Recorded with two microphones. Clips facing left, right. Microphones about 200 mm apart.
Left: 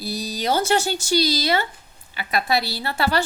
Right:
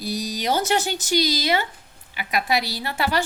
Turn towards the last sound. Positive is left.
turn(degrees=-15)  # may be behind; listen again after turning